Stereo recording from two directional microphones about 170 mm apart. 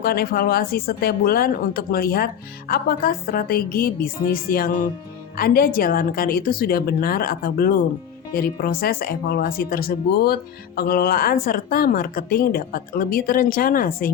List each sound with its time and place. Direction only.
0.0 s speech: 65° left (ahead or behind)